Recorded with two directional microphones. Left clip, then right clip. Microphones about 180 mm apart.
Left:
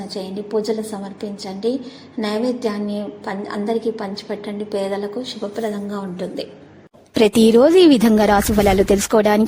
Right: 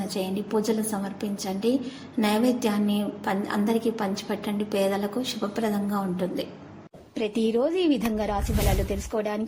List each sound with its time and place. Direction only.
0.1 s a woman's voice: 15° right (ahead or behind)
6.1 s a woman's voice: 5° right (ahead or behind)
7.1 s a woman's voice: 90° left